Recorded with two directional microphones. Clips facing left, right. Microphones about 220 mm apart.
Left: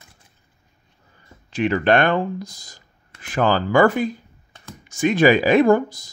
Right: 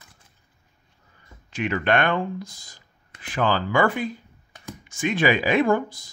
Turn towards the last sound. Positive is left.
turn(degrees=40)  # may be behind; listen again after turning